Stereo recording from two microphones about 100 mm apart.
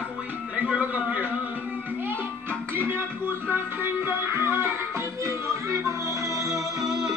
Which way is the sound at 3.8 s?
25° right (ahead or behind).